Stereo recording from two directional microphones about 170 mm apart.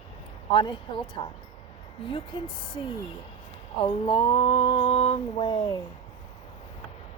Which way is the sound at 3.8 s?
30° left (ahead or behind).